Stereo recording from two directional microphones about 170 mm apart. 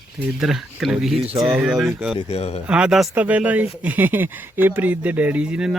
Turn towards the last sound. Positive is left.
turn(degrees=-5)  # may be behind; listen again after turning